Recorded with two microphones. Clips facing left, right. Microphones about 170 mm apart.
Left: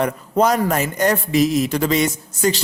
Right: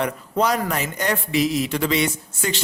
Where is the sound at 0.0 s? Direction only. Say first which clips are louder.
Left 4 dB; 45° left (ahead or behind).